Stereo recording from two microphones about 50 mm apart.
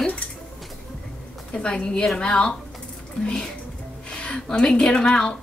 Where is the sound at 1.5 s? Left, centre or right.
Centre.